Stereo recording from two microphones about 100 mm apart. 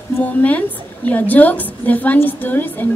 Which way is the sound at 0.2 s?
15° left (ahead or behind).